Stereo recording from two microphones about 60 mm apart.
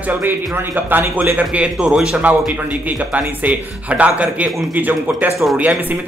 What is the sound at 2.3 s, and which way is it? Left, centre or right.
Speech, right.